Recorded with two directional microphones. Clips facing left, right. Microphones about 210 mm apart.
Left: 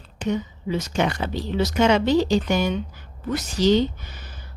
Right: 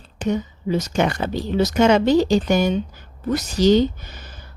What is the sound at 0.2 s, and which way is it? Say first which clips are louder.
A woman's voice: right 2 dB; 45° right (ahead or behind).